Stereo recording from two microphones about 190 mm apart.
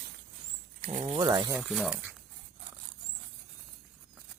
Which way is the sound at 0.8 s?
35° right (ahead or behind).